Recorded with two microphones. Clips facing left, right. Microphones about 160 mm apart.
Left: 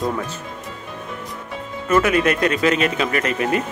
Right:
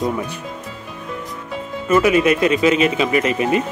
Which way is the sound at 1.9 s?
5° right (ahead or behind).